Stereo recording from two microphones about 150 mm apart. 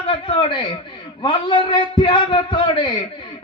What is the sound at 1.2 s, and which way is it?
A man's voice, 30° left (ahead or behind).